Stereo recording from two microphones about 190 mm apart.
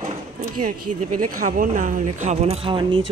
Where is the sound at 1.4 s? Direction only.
45° right (ahead or behind); by 3.0 s 25° right (ahead or behind).